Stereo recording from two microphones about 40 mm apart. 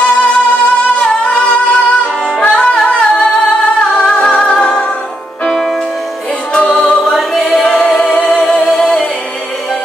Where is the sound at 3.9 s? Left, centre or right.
Left.